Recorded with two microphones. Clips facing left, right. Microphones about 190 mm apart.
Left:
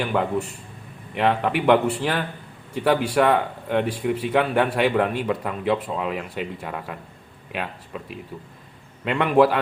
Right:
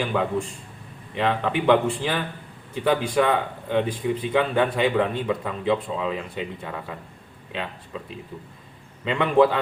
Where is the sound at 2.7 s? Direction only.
10° left (ahead or behind).